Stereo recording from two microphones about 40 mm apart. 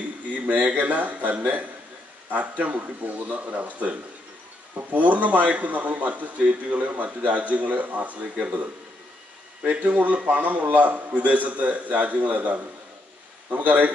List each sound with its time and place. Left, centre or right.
0.3 s a man's voice: right
9.7 s a man's voice: right